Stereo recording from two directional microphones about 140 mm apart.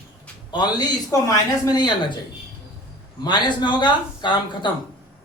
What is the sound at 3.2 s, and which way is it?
Speech, 30° left (ahead or behind).